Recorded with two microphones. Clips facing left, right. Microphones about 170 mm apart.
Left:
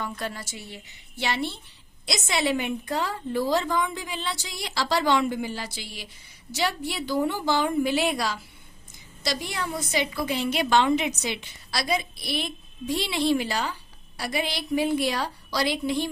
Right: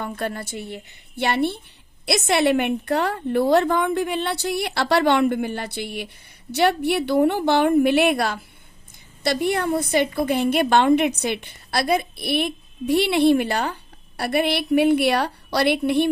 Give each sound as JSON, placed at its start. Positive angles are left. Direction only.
{"t": 0.0, "sound": "a woman's voice", "side_deg": -55}